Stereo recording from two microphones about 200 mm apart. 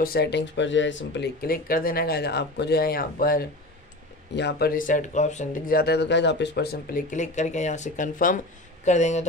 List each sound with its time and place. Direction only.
0.0 s speech: 50° left (ahead or behind); by 9.2 s 35° left (ahead or behind)